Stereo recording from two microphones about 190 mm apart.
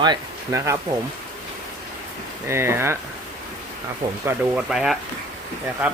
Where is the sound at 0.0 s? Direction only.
20° right (ahead or behind).